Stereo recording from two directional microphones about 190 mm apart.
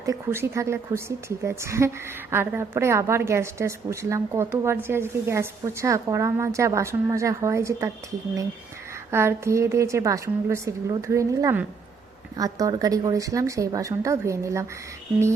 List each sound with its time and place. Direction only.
0.0 s a woman's voice: 15° right (ahead or behind)
9.0 s a woman's voice: 15° right (ahead or behind)